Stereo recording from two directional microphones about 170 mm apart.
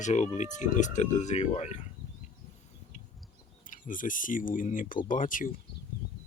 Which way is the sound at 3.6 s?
50° left (ahead or behind).